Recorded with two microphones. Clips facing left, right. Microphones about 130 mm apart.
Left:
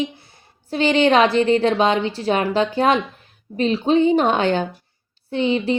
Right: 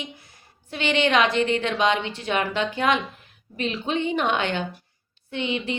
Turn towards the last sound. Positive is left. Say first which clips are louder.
# left 8 dB
turn(degrees=35)  # may be behind; listen again after turning